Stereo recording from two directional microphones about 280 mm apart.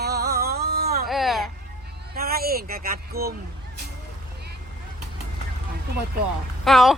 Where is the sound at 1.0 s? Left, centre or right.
Centre.